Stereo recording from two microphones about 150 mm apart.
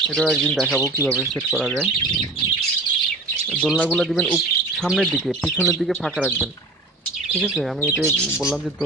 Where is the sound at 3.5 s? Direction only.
5° left (ahead or behind).